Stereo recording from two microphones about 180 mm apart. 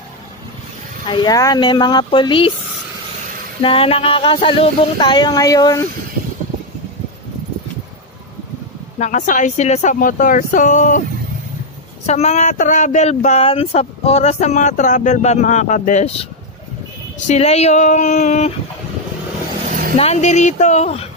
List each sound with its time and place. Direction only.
1.0 s speech: 25° left (ahead or behind)
3.6 s speech: 30° left (ahead or behind)
8.9 s speech: 45° left (ahead or behind)
12.1 s speech: 40° left (ahead or behind)
17.3 s speech: 35° left (ahead or behind)
20.0 s speech: 40° left (ahead or behind)